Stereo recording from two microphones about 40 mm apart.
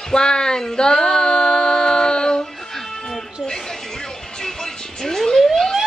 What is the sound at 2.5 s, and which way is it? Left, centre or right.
Music, centre.